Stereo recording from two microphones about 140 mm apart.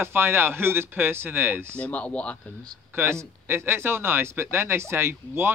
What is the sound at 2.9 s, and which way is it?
Speech, 20° right (ahead or behind).